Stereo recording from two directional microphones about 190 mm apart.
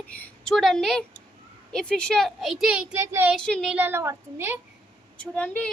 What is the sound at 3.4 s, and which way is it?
Speech, 5° left (ahead or behind).